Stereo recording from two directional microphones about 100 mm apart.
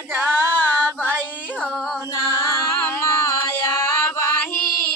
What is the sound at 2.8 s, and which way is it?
Music, 20° left (ahead or behind).